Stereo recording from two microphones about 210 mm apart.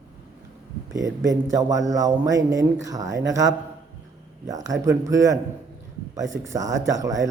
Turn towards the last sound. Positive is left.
turn(degrees=-15)  # may be behind; listen again after turning